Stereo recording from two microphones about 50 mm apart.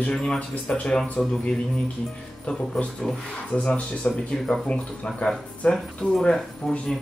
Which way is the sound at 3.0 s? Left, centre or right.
Centre.